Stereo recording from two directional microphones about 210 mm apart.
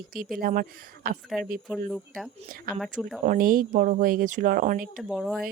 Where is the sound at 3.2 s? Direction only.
40° right (ahead or behind).